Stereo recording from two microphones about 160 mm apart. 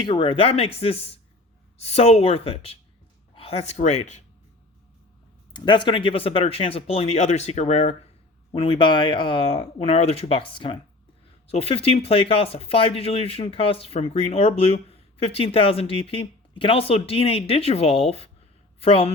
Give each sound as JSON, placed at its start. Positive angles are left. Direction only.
{"t": 0.0, "sound": "speech", "side_deg": 30}
{"t": 5.5, "sound": "speech", "side_deg": 30}